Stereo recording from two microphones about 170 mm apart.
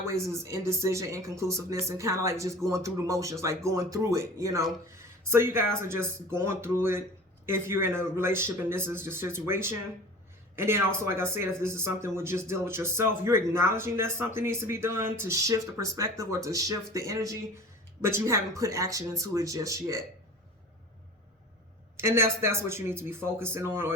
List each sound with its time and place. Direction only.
0.1 s speech: 15° right (ahead or behind)
21.9 s speech: 15° right (ahead or behind)